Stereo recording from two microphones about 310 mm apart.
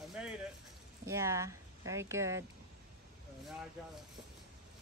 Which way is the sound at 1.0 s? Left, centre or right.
Centre.